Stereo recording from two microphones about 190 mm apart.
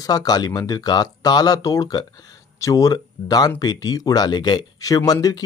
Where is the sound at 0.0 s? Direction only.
20° left (ahead or behind).